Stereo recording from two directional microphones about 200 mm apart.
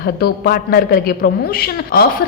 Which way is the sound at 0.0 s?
50° left (ahead or behind).